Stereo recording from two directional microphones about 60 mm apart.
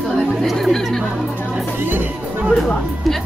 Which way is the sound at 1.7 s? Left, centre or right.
Right.